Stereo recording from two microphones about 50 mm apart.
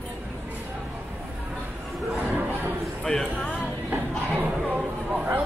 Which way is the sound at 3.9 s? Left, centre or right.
Right.